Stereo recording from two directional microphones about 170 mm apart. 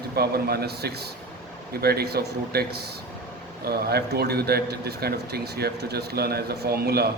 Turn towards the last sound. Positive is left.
turn(degrees=-70)  # may be behind; listen again after turning